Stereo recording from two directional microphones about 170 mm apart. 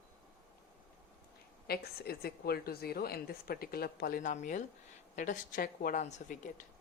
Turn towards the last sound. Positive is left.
turn(degrees=45)  # may be behind; listen again after turning